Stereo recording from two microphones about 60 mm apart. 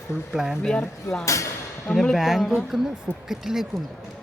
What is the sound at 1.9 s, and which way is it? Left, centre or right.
Speech, centre.